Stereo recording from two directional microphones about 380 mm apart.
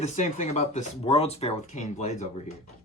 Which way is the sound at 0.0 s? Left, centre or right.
Centre.